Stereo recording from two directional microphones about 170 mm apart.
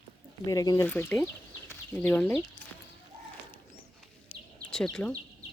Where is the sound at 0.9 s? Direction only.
10° left (ahead or behind).